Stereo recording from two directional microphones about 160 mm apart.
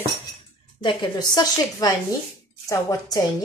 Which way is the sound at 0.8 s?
25° left (ahead or behind).